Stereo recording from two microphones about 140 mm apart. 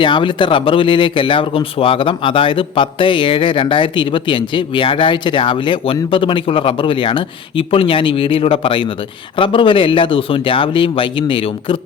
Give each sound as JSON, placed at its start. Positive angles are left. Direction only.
{"t": 0.0, "sound": "speech", "side_deg": 35}